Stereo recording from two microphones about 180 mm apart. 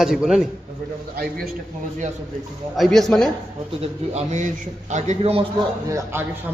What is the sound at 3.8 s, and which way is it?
Speech, 40° right (ahead or behind).